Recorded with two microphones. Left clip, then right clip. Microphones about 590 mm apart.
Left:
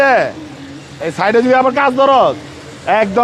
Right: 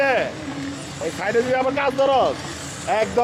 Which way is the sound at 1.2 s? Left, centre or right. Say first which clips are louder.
Left 9 dB; left.